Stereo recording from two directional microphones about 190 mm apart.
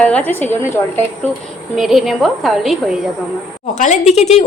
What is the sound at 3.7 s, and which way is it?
Speech, 40° left (ahead or behind).